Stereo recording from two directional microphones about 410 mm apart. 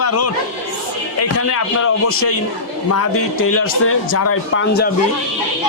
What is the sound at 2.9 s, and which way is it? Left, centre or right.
A man's voice, left.